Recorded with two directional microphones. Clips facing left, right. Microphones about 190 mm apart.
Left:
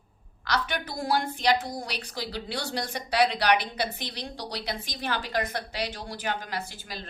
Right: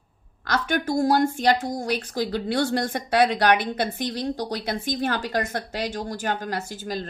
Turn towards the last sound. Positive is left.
turn(degrees=-45)  # may be behind; listen again after turning